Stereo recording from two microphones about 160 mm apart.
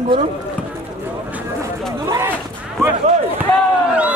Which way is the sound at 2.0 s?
20° right (ahead or behind).